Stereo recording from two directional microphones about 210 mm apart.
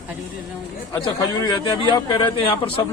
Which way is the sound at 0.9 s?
20° left (ahead or behind).